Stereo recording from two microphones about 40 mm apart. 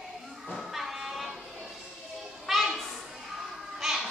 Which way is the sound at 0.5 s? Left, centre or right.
Centre.